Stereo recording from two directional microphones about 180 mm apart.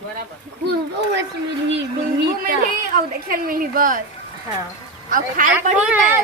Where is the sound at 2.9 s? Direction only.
55° right (ahead or behind).